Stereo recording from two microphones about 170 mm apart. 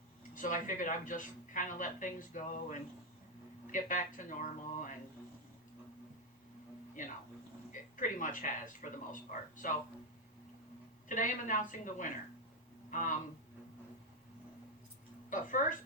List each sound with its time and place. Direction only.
0.3 s a man's voice: 50° left (ahead or behind)
7.7 s a man's voice: 50° left (ahead or behind)
11.1 s a man's voice: 50° left (ahead or behind)
15.3 s a man's voice: 50° left (ahead or behind)